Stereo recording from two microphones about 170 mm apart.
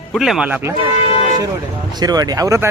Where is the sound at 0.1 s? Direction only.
Centre (ahead or behind).